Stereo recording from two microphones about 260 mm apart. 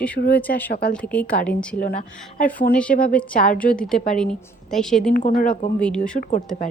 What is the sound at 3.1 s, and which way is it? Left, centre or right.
A woman's voice, centre.